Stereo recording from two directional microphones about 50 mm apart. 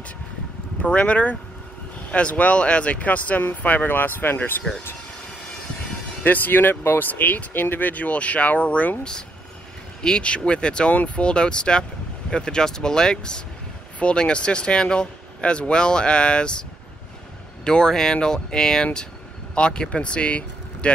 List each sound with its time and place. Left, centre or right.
0.8 s speech: left
6.2 s speech: left
10.0 s speech: centre
17.6 s speech: centre